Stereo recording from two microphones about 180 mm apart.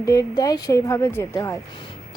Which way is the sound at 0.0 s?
20° left (ahead or behind).